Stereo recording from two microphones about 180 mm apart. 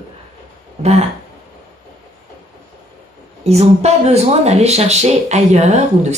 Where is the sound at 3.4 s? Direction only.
35° right (ahead or behind).